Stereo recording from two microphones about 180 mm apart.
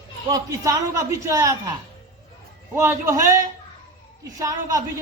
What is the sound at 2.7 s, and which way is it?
Speech, 15° right (ahead or behind).